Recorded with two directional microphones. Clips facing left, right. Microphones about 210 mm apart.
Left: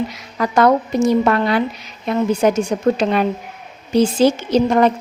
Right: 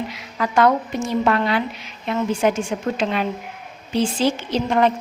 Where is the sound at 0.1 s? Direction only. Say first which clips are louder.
Left 3 dB; 40° left (ahead or behind).